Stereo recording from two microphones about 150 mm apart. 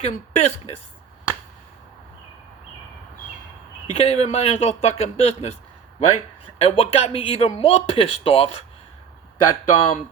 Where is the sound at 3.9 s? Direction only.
45° left (ahead or behind).